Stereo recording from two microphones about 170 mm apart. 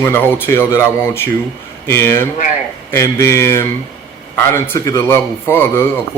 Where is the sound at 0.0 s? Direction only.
10° left (ahead or behind).